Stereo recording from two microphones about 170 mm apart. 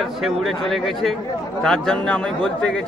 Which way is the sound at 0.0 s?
Centre (ahead or behind).